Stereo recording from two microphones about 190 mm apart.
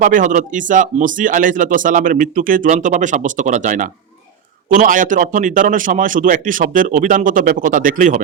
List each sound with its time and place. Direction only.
0.0 s speech: 45° right (ahead or behind)